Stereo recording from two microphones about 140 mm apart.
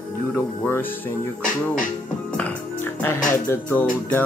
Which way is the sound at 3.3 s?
15° left (ahead or behind).